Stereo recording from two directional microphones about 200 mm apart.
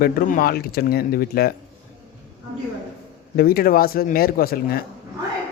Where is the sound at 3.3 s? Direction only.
50° left (ahead or behind).